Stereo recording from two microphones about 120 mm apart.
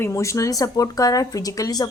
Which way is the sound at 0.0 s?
25° left (ahead or behind).